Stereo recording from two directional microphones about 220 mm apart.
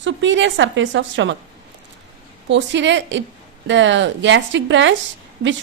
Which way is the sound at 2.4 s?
55° right (ahead or behind).